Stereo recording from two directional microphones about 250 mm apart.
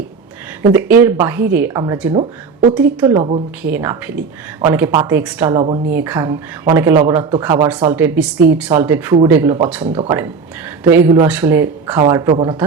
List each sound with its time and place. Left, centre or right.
0.6 s speech: centre
2.1 s speech: right
3.6 s speech: centre
5.5 s speech: right
5.9 s speech: centre